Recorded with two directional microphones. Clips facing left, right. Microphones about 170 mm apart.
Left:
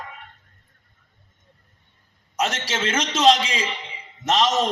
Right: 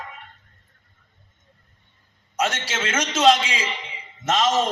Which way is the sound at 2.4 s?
35° left (ahead or behind).